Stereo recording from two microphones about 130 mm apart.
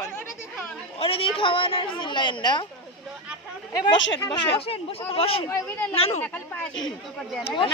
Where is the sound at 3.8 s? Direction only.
35° left (ahead or behind).